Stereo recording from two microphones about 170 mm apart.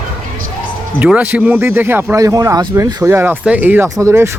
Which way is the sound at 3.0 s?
15° right (ahead or behind).